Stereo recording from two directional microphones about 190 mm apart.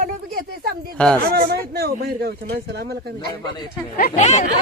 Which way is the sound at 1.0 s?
5° left (ahead or behind).